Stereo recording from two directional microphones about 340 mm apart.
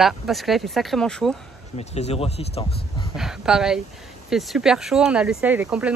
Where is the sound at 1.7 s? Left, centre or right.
Centre.